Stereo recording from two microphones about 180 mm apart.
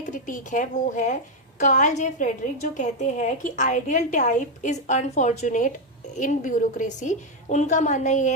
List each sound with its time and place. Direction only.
0.0 s a woman's voice: 45° left (ahead or behind)